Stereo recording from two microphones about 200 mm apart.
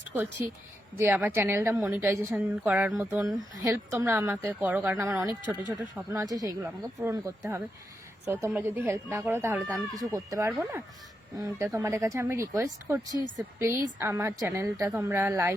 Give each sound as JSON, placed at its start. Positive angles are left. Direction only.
{"t": 0.9, "sound": "a woman's voice", "side_deg": -10}